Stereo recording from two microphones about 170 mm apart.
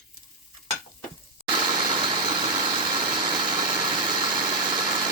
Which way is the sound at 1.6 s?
30° right (ahead or behind).